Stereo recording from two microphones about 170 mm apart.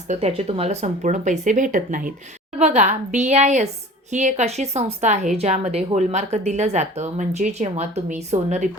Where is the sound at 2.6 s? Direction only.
40° right (ahead or behind).